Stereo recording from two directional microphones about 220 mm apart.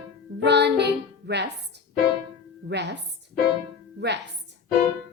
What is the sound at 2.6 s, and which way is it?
Music, 50° right (ahead or behind).